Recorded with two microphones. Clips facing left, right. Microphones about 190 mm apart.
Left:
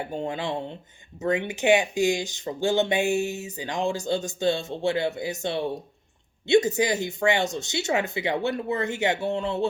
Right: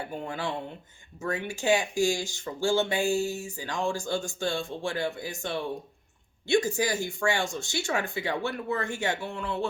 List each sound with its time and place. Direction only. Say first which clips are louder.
0.0 s speech: left 4 dB; 25° left (ahead or behind)